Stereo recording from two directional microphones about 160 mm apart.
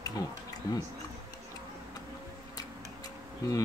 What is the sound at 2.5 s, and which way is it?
Tick-tock, 20° left (ahead or behind).